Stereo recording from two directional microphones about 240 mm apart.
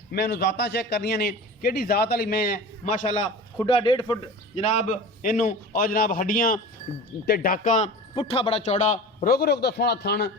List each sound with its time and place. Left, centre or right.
0.1 s a man's voice: left